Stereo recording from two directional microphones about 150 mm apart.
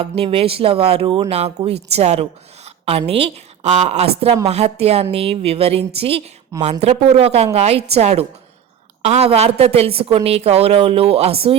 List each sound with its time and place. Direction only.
0.0 s a woman's voice: 40° right (ahead or behind)